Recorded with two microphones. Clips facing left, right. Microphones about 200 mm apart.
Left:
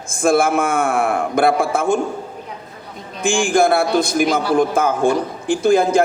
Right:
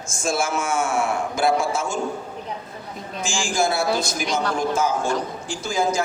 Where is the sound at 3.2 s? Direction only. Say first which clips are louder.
Left 8 dB; 55° left (ahead or behind).